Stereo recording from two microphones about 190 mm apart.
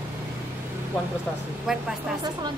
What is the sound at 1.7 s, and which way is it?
Speech, centre (ahead or behind).